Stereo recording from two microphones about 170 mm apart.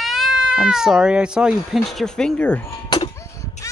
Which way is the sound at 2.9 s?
25° left (ahead or behind).